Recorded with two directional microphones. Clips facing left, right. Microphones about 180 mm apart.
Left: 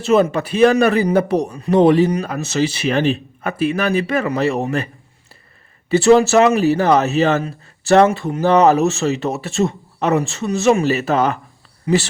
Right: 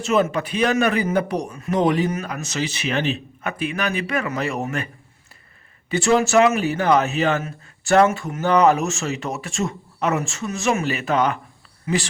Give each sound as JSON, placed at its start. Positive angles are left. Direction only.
{"t": 0.0, "sound": "a man's voice", "side_deg": 35}
{"t": 5.9, "sound": "a man's voice", "side_deg": 35}